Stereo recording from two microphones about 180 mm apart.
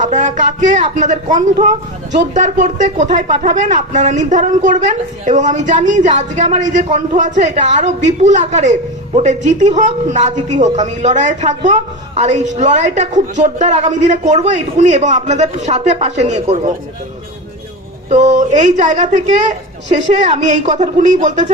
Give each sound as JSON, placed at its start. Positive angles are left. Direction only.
{"t": 0.0, "sound": "speech", "side_deg": -45}
{"t": 18.1, "sound": "speech", "side_deg": -40}